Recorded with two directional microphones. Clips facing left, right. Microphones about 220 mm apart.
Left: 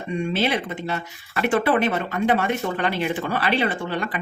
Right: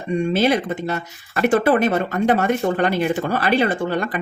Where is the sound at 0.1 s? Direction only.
40° right (ahead or behind).